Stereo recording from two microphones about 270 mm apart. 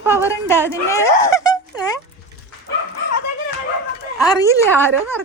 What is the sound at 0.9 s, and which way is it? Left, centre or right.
Speech, centre.